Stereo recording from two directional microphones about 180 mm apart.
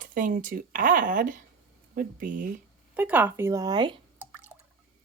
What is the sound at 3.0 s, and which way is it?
Speech, 10° right (ahead or behind).